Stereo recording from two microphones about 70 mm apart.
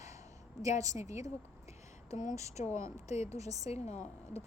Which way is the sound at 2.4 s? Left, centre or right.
Right.